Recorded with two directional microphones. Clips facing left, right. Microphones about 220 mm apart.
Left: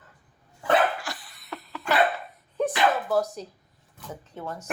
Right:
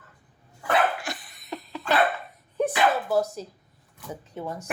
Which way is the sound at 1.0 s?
20° right (ahead or behind).